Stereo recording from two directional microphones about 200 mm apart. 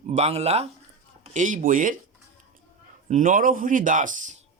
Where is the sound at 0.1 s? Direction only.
30° right (ahead or behind).